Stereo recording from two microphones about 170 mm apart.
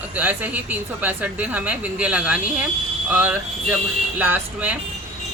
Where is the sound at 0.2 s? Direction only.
10° right (ahead or behind).